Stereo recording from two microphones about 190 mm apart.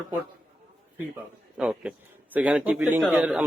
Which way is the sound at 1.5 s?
5° right (ahead or behind).